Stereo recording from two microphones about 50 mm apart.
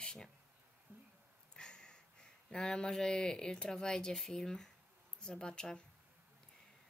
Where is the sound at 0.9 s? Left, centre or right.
Right.